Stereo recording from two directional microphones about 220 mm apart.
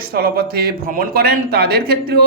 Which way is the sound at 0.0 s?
45° right (ahead or behind).